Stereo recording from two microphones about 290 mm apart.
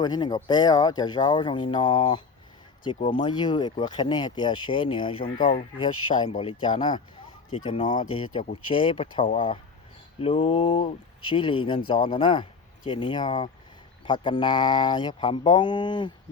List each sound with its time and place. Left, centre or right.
0.0 s speech: centre